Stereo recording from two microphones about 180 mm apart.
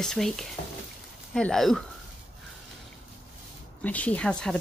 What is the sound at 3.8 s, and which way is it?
Speech, 10° left (ahead or behind).